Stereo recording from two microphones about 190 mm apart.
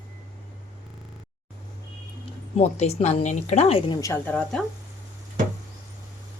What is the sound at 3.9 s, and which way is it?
Speech, 15° left (ahead or behind).